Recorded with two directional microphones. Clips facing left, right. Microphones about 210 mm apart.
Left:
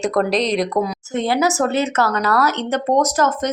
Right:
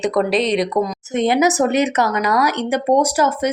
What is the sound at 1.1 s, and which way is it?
Speech, 20° right (ahead or behind).